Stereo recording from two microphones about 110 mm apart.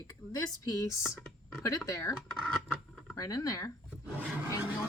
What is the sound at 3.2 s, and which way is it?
Speech, 30° left (ahead or behind).